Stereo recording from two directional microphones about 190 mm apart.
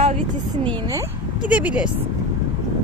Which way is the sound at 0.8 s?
15° right (ahead or behind).